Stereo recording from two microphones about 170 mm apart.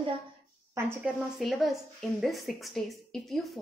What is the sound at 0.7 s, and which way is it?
Speech, 15° right (ahead or behind).